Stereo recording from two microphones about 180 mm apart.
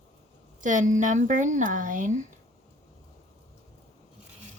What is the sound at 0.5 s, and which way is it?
Speech, 45° right (ahead or behind).